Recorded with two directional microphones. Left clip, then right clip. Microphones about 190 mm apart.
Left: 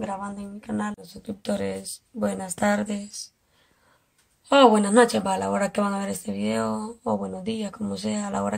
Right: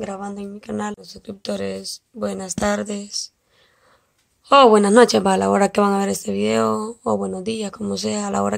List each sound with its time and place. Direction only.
0.6 s speech: 40° right (ahead or behind)
4.5 s speech: 45° right (ahead or behind)